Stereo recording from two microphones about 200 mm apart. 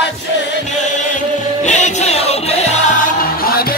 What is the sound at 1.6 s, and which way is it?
Music, 35° left (ahead or behind).